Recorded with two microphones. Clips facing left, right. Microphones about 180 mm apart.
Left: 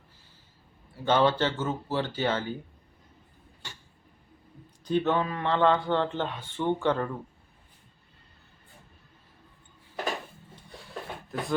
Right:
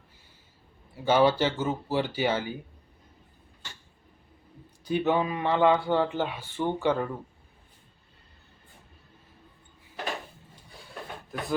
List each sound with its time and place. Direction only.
1.0 s speech: 10° right (ahead or behind)
4.9 s speech: 10° right (ahead or behind)
10.5 s a sound: centre (ahead or behind)